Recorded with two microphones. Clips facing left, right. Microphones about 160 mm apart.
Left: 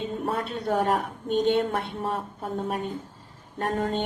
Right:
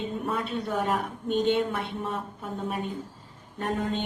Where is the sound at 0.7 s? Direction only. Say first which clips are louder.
Left 5 dB; 50° left (ahead or behind).